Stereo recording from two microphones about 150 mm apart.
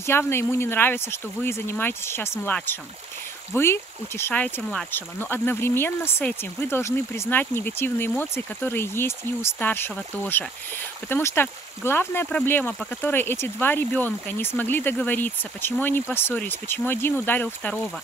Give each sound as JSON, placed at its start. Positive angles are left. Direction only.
{"t": 0.0, "sound": "speech", "side_deg": 15}